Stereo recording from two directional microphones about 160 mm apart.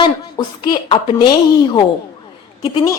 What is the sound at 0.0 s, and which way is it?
A woman's voice, 25° left (ahead or behind).